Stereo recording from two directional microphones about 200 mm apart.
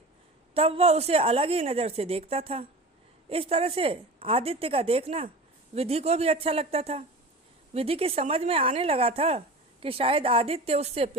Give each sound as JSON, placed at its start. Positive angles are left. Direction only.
{"t": 0.5, "sound": "a woman's voice", "side_deg": -30}